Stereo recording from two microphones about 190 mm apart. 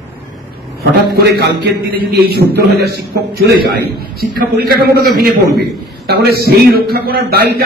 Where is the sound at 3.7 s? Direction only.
50° right (ahead or behind).